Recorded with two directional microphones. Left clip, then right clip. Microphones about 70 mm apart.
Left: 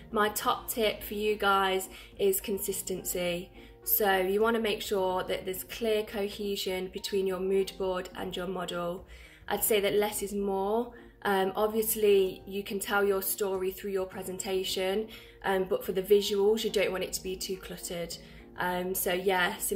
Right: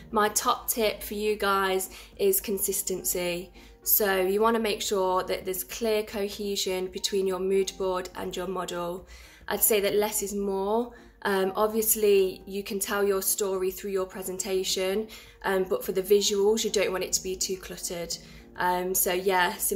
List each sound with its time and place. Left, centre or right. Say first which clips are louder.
0.1 s speech: right 3 dB; right